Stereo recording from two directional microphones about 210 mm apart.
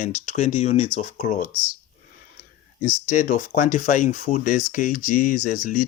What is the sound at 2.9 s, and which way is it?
Speech, 35° left (ahead or behind).